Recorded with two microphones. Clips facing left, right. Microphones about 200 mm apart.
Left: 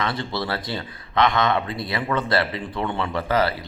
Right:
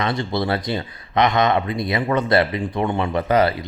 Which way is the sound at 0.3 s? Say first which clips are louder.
Right 5 dB; 20° right (ahead or behind).